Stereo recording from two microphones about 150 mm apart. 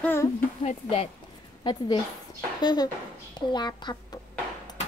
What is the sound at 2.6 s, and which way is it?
Speech, 30° left (ahead or behind).